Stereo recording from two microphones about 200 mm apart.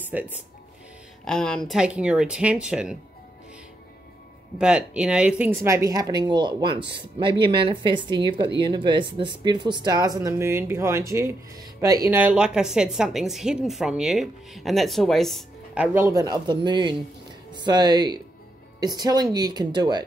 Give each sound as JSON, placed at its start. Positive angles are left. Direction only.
{"t": 0.1, "sound": "speech", "side_deg": -5}
{"t": 1.2, "sound": "speech", "side_deg": 5}
{"t": 4.6, "sound": "speech", "side_deg": -5}